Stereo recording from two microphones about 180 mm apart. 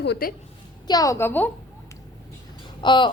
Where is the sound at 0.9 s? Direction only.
20° left (ahead or behind).